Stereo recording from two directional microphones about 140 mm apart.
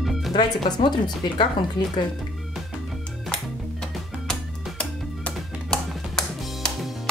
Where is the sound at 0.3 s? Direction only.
30° left (ahead or behind).